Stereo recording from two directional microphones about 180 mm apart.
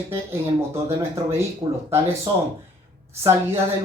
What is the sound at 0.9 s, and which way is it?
Speech, 15° right (ahead or behind).